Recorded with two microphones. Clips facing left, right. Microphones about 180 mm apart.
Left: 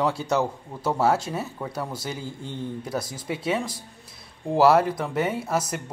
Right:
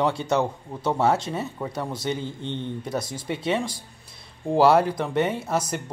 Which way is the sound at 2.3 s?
25° right (ahead or behind).